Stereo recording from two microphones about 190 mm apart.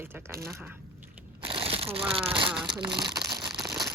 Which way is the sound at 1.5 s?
30° right (ahead or behind).